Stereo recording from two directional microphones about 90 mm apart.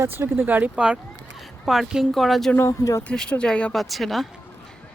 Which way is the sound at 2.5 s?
35° left (ahead or behind).